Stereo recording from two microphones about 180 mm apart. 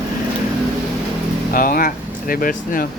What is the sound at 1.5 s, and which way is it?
Speech, 50° left (ahead or behind).